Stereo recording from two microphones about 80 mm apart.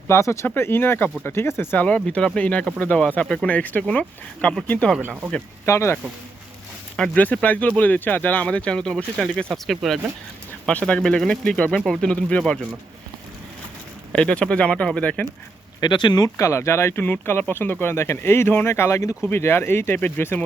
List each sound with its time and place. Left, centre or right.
0.1 s speech: left
2.0 s speech: centre
4.9 s speech: right
5.6 s speech: left
6.9 s speech: centre
7.2 s speech: centre
10.7 s speech: centre
14.1 s speech: centre
15.8 s speech: left
16.4 s speech: left